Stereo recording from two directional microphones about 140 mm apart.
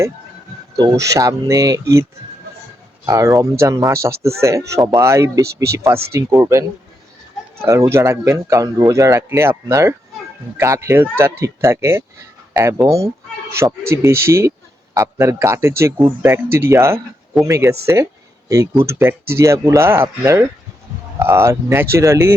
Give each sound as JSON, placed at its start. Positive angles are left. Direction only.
{"t": 0.8, "sound": "speech", "side_deg": -25}
{"t": 3.1, "sound": "speech", "side_deg": -20}